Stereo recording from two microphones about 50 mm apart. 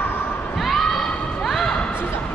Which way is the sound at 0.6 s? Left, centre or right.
Centre.